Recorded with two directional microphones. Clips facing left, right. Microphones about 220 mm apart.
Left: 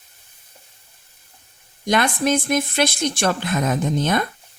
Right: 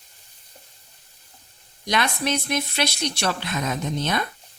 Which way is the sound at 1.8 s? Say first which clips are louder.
Left 5 dB; 50° left (ahead or behind).